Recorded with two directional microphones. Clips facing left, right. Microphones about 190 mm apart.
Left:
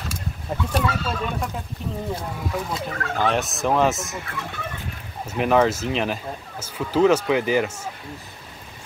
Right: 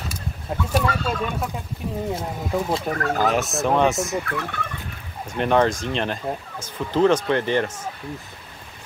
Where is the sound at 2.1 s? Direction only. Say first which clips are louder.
Right 3 dB; 25° right (ahead or behind).